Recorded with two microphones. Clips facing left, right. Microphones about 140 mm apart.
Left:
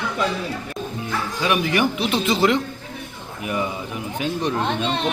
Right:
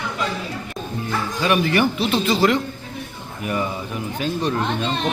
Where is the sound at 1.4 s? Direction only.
10° left (ahead or behind).